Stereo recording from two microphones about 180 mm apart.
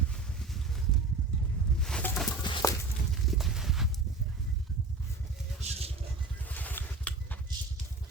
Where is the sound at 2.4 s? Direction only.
25° left (ahead or behind).